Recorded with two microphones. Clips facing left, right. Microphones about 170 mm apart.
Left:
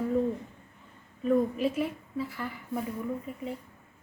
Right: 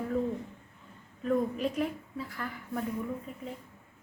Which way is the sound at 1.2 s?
5° left (ahead or behind).